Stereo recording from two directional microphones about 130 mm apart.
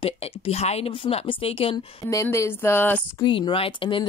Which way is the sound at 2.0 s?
25° left (ahead or behind).